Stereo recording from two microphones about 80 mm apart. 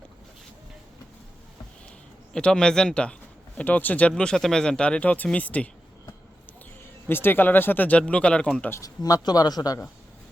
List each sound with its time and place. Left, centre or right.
2.3 s speech: centre
4.1 s speech: centre
7.1 s speech: left; by 8.6 s centre
8.8 s speech: left